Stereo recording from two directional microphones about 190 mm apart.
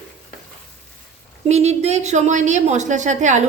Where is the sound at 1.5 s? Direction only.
35° right (ahead or behind).